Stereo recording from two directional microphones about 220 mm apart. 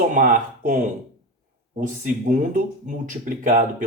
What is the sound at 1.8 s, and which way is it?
Speech, 35° right (ahead or behind).